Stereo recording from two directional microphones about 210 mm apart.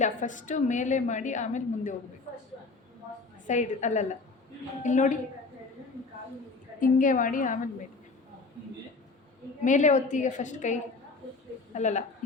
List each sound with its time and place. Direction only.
0.0 s a woman's voice: 35° left (ahead or behind)
3.4 s a woman's voice: 35° left (ahead or behind)
6.7 s a woman's voice: 40° left (ahead or behind)
9.6 s a woman's voice: 35° left (ahead or behind)